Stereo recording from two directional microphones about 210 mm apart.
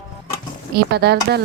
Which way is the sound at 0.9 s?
50° right (ahead or behind).